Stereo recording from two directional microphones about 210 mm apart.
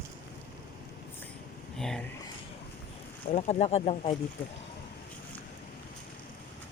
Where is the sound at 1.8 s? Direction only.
Centre (ahead or behind).